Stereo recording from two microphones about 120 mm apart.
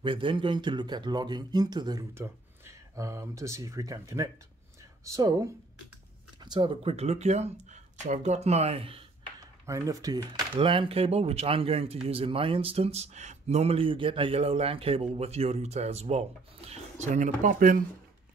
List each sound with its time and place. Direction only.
0.0 s speech: 45° right (ahead or behind)
2.1 s speech: 25° right (ahead or behind)
6.4 s speech: 40° right (ahead or behind)
9.4 s speech: 30° right (ahead or behind)
10.5 s speech: 45° right (ahead or behind); by 17.7 s 90° right